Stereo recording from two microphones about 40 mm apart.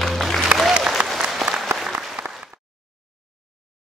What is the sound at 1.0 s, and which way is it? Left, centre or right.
Applause, right.